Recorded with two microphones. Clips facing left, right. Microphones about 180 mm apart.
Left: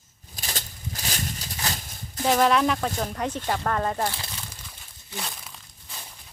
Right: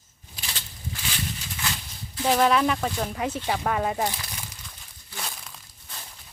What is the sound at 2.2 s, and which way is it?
Speech, centre (ahead or behind).